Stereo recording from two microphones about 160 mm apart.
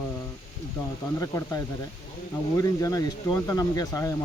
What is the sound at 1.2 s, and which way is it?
Speech, 20° left (ahead or behind).